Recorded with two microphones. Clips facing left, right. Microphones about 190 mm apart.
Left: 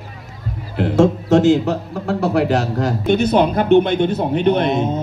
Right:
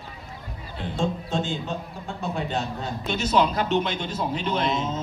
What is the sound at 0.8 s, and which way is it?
A man's voice, 85° left.